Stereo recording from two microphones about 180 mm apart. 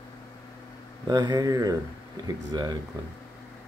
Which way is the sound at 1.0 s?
20° right (ahead or behind).